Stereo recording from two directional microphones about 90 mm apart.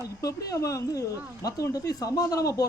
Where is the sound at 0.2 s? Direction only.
40° left (ahead or behind).